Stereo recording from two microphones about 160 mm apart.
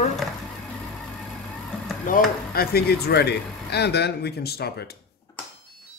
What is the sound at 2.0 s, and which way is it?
Speech, 65° left (ahead or behind).